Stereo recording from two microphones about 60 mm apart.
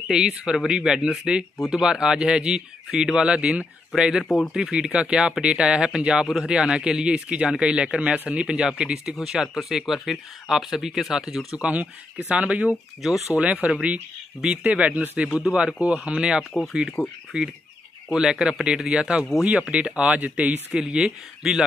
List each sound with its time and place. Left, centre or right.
0.1 s a man's voice: centre
4.2 s speech: centre
4.6 s a man's voice: centre
11.5 s a man's voice: right
17.0 s speech: centre
17.3 s a man's voice: centre